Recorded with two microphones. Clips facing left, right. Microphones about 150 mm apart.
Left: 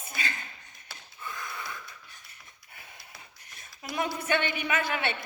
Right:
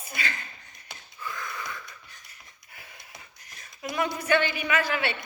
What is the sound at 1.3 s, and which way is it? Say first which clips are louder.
Wheeze: right 2 dB; 25° left (ahead or behind).